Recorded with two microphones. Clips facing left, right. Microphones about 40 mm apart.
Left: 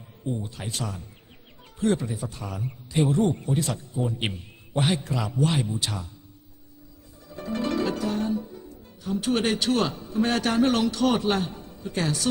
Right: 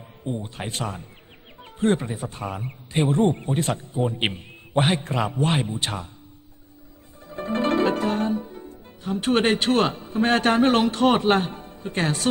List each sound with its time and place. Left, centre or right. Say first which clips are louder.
0.3 s a man's voice: right 2 dB; right
7.3 s music: right 5 dB; right